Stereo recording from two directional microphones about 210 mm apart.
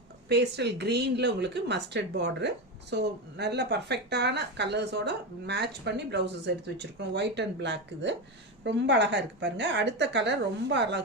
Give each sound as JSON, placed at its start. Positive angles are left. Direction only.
{"t": 0.3, "sound": "a woman's voice", "side_deg": -55}